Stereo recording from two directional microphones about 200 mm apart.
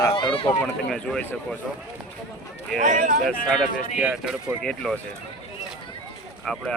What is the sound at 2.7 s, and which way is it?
Speech, 40° right (ahead or behind).